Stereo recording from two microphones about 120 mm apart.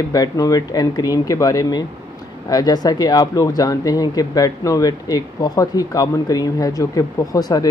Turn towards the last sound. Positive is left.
turn(degrees=30)  # may be behind; listen again after turning